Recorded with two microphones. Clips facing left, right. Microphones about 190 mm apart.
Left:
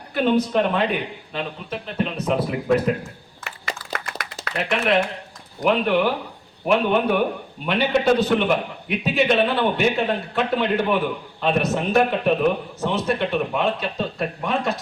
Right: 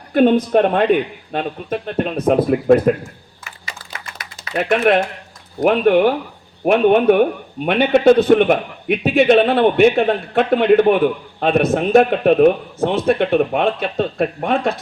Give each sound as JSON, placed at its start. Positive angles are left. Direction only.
{"t": 0.1, "sound": "a man's voice", "side_deg": -55}
{"t": 3.4, "sound": "a sound", "side_deg": 65}
{"t": 4.5, "sound": "a man's voice", "side_deg": -50}